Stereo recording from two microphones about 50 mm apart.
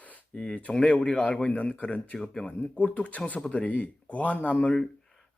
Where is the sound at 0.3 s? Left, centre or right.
Left.